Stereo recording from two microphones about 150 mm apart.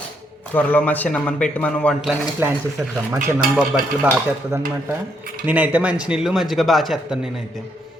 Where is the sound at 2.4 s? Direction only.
15° right (ahead or behind).